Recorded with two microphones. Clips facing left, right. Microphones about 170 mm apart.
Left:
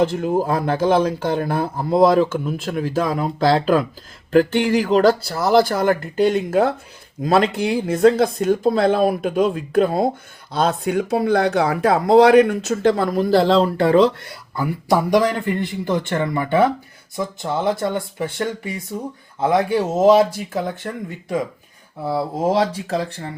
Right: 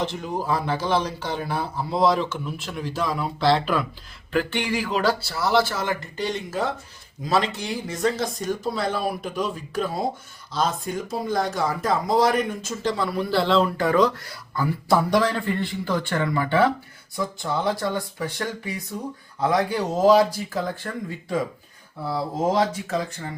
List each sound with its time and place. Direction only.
0.0 s speech: 50° left (ahead or behind); by 23.2 s 35° left (ahead or behind)